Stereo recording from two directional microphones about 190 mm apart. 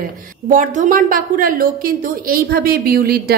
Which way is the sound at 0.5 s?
40° right (ahead or behind).